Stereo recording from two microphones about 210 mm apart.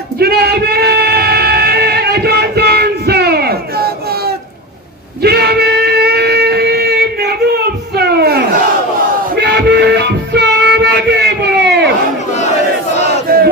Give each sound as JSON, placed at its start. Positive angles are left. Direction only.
{"t": 0.2, "sound": "a sound", "side_deg": -50}
{"t": 9.3, "sound": "music", "side_deg": -50}
{"t": 13.3, "sound": "battle cry", "side_deg": -45}